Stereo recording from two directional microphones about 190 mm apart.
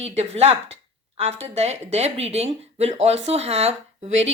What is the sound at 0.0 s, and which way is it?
Speech, 35° right (ahead or behind).